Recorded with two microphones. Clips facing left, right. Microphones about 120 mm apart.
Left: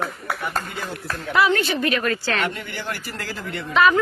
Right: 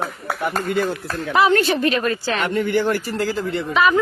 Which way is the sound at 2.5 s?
50° right (ahead or behind).